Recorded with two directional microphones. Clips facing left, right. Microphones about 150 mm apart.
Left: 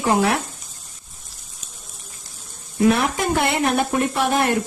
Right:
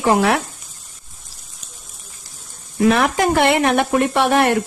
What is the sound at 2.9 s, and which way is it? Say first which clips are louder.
Speech: right 4 dB; 90° right.